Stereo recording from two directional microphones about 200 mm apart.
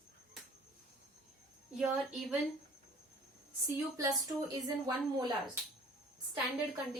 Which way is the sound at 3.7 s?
20° right (ahead or behind).